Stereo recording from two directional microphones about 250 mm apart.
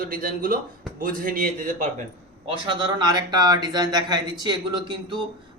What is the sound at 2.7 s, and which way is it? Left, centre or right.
Speech, centre.